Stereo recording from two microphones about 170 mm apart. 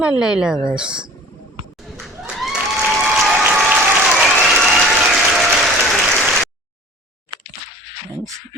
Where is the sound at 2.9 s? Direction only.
5° right (ahead or behind).